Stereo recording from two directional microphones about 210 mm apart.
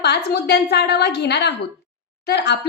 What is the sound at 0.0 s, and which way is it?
A woman's voice, 50° left (ahead or behind).